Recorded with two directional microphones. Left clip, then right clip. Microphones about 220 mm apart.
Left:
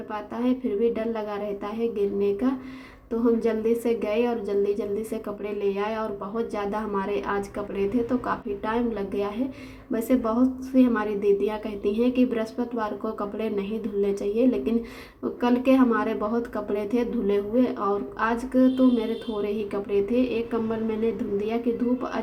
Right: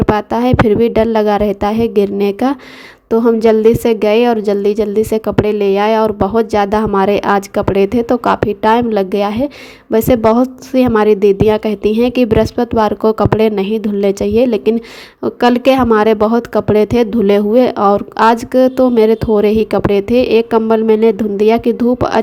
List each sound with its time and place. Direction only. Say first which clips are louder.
0.2 s a woman's voice: right 16 dB; 45° right (ahead or behind)